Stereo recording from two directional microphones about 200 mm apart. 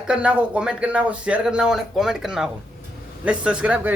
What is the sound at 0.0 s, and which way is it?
Speech, 5° right (ahead or behind).